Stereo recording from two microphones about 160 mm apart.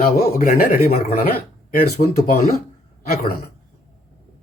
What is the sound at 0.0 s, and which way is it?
Speech, 55° left (ahead or behind).